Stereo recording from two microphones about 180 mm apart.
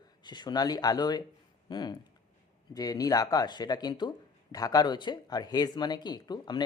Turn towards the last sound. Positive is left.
turn(degrees=25)  # may be behind; listen again after turning